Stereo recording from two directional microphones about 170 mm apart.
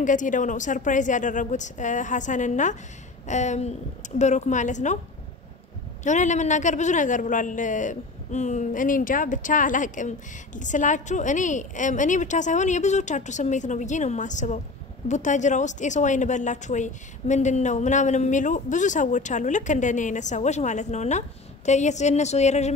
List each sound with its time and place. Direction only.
0.0 s a woman's voice: 50° left (ahead or behind)
6.0 s a woman's voice: 45° left (ahead or behind)